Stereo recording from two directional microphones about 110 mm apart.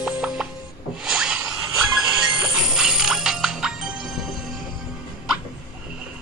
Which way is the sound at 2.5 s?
5° right (ahead or behind).